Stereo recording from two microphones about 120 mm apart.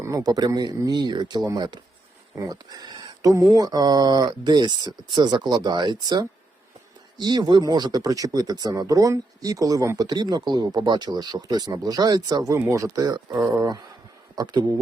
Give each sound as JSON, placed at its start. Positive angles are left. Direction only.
{"t": 0.0, "sound": "speech", "side_deg": -30}